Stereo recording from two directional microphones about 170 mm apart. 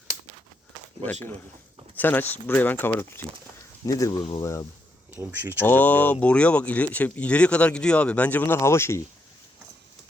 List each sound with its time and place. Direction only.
1.0 s speech: 10° left (ahead or behind)
5.1 s speech: 10° right (ahead or behind)
5.6 s speech: 10° left (ahead or behind)